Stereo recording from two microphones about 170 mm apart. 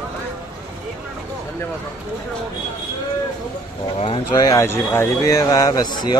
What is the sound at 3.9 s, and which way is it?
Speech, 30° left (ahead or behind).